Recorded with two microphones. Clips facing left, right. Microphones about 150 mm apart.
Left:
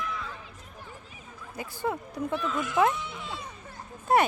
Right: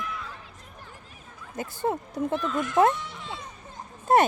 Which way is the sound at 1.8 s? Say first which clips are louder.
Right 3 dB; 35° right (ahead or behind).